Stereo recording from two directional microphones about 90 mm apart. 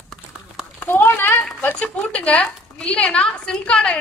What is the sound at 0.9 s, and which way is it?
A woman's voice, 25° left (ahead or behind).